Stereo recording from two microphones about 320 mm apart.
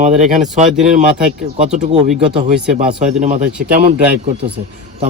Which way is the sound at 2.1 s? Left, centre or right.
Centre.